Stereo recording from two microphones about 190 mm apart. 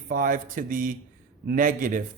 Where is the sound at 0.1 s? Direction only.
45° right (ahead or behind).